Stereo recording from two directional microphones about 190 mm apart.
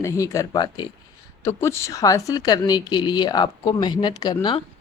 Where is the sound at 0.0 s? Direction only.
15° left (ahead or behind).